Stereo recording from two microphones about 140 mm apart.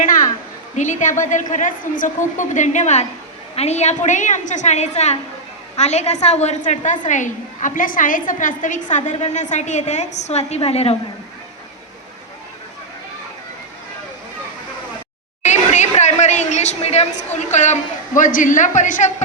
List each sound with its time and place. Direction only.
0.8 s a woman's voice: 60° left (ahead or behind)
15.4 s chatter: 55° left (ahead or behind)
18.2 s a woman's voice: 75° left (ahead or behind)